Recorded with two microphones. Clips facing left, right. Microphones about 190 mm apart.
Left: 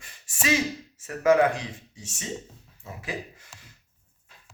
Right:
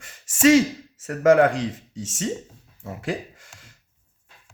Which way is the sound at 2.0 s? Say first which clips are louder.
Right 12 dB; 90° right.